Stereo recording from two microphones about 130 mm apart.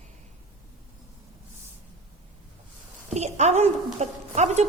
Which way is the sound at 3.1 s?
60° right (ahead or behind).